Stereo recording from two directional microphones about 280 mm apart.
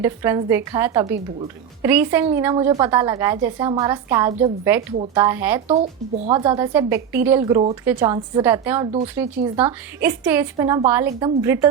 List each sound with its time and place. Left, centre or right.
0.0 s a woman's voice: centre
4.6 s a woman's voice: centre